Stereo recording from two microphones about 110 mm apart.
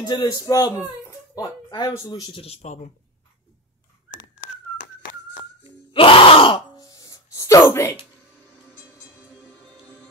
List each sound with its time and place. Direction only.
0.0 s speech: 40° left (ahead or behind)
2.3 s speech: 65° left (ahead or behind); by 2.9 s 90° left
5.9 s groan: 55° left (ahead or behind)
6.8 s a sound: 35° left (ahead or behind)